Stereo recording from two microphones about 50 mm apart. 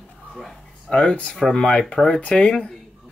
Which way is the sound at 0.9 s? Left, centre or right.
Left.